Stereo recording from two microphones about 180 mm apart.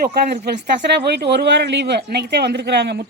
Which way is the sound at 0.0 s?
65° right (ahead or behind).